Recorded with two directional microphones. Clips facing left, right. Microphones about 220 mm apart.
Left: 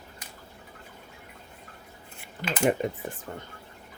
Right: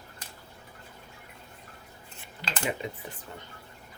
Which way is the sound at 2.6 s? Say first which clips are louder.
Left 9 dB; 50° left (ahead or behind).